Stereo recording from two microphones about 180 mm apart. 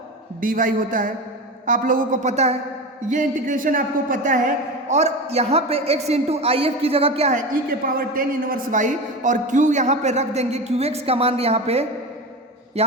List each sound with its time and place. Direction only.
0.4 s a man's voice: 50° right (ahead or behind); by 11.9 s 35° right (ahead or behind)